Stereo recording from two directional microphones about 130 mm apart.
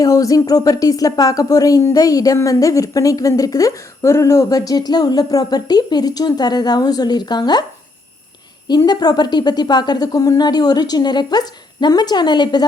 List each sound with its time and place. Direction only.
0.0 s speech: 25° left (ahead or behind)
8.6 s speech: 30° left (ahead or behind)